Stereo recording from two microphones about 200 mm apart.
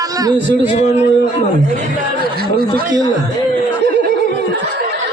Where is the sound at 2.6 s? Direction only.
50° right (ahead or behind).